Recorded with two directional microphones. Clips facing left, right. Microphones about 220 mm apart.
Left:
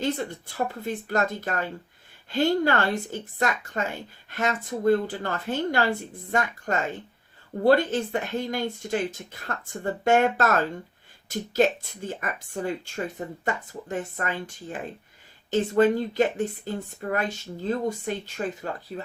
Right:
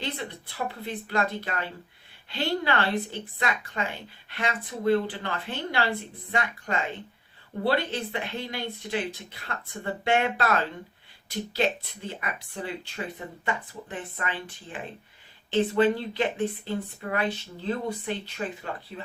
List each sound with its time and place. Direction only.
0.0 s speech: 45° left (ahead or behind)